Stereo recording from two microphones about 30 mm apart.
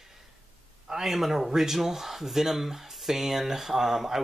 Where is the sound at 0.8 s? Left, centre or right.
Centre.